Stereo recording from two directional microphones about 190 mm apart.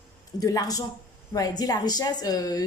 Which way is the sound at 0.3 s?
20° left (ahead or behind).